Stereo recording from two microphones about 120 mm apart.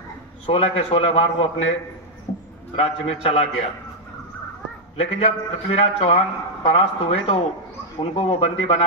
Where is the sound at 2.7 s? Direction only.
55° left (ahead or behind).